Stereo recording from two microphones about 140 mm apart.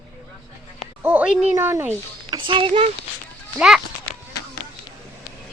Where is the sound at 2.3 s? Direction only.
35° right (ahead or behind).